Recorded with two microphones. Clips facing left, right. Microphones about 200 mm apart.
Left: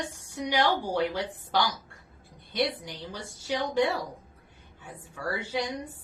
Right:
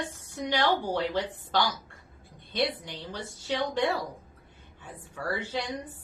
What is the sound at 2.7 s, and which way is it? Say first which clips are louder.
A woman's voice: right 1 dB; 10° left (ahead or behind).